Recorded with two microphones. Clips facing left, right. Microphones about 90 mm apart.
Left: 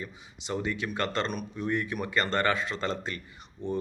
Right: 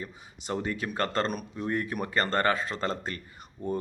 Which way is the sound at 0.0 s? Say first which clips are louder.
Even; 40° right (ahead or behind).